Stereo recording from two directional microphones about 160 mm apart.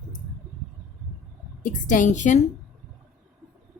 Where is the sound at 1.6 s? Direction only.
55° left (ahead or behind).